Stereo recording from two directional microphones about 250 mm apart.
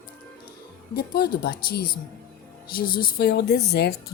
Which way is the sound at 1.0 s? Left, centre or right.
Left.